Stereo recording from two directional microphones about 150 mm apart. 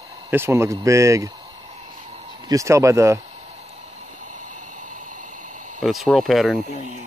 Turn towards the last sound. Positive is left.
turn(degrees=0)  # may be behind; listen again after turning